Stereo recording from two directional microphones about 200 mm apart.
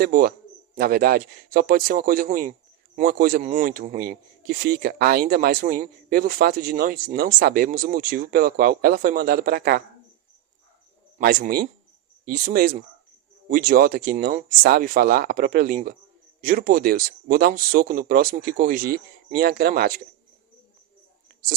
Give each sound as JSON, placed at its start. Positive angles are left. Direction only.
{"t": 0.0, "sound": "speech", "side_deg": -45}
{"t": 11.2, "sound": "speech", "side_deg": -50}